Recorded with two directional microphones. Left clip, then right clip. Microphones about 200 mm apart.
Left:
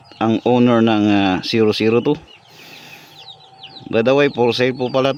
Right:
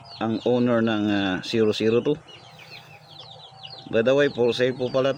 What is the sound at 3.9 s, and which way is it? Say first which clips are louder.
Speech: left 5 dB; 45° left (ahead or behind).